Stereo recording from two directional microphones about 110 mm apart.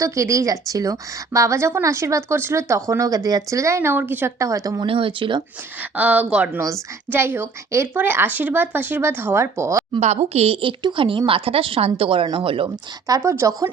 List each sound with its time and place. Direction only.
0.0 s a woman's voice: 30° right (ahead or behind)
4.9 s speech: 55° right (ahead or behind)
6.0 s a woman's voice: 15° right (ahead or behind)
10.0 s a woman's voice: 80° right; by 12.7 s 55° right (ahead or behind)
13.1 s a woman's voice: 30° right (ahead or behind)